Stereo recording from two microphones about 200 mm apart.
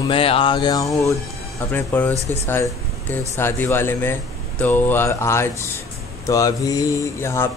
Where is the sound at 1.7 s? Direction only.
10° left (ahead or behind).